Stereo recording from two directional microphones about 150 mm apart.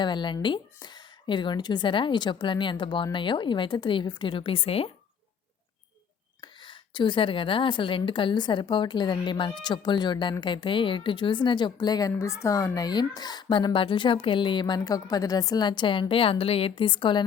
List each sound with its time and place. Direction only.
0.0 s a woman's voice: 30° left (ahead or behind)
6.4 s a woman's voice: 30° left (ahead or behind)